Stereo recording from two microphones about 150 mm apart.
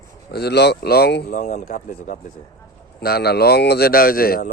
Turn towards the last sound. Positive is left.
turn(degrees=85)